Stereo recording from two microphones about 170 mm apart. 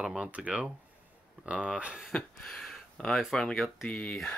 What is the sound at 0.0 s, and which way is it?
Speech, 5° right (ahead or behind).